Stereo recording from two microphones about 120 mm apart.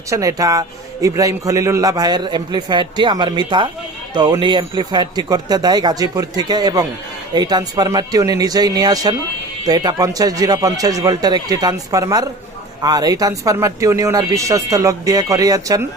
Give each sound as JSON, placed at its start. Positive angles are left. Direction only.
{"t": 0.1, "sound": "speech", "side_deg": -30}